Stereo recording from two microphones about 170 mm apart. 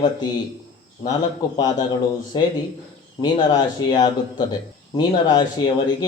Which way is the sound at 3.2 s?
25° left (ahead or behind).